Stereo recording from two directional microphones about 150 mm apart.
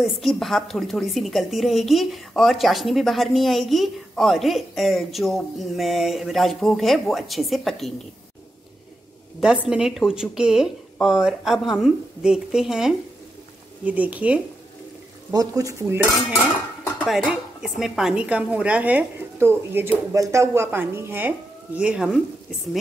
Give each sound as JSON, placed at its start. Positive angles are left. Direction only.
{"t": 0.0, "sound": "a woman's voice", "side_deg": 0}
{"t": 9.4, "sound": "a woman's voice", "side_deg": -5}
{"t": 15.3, "sound": "cutlery", "side_deg": -25}
{"t": 17.0, "sound": "a woman's voice", "side_deg": 0}